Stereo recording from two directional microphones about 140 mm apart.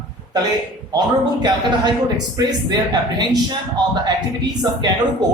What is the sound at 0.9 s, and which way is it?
Speech, 30° right (ahead or behind).